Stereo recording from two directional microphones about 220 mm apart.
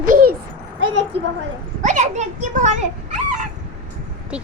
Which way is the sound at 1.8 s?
30° right (ahead or behind).